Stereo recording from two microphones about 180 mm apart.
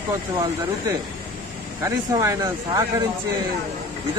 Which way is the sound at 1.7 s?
15° right (ahead or behind).